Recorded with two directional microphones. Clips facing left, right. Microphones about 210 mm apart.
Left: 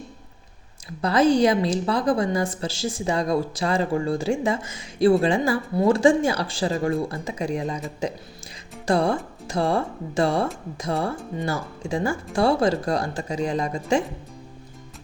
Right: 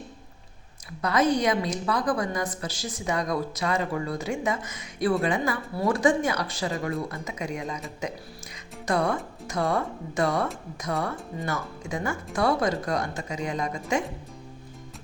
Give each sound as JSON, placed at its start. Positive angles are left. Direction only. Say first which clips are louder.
{"t": 1.0, "sound": "a woman's voice", "louder": "left 5 dB", "side_deg": 30}